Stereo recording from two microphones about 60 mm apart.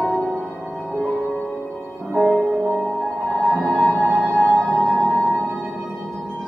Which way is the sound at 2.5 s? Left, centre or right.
Centre.